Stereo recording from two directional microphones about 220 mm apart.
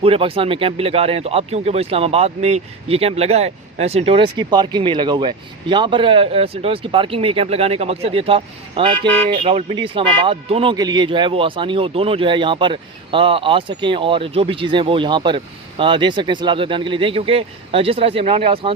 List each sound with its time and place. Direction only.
0.0 s speech: 25° right (ahead or behind)